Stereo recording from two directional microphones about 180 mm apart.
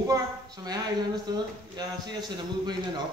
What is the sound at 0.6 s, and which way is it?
Speech, 20° right (ahead or behind).